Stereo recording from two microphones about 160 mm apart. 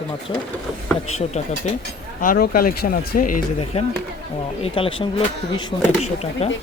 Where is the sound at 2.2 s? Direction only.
65° left (ahead or behind).